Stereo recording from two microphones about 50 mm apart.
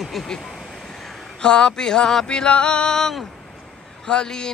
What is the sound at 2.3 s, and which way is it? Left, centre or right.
Speech, left.